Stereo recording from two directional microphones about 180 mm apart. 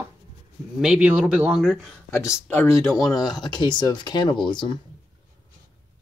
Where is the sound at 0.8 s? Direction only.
5° right (ahead or behind).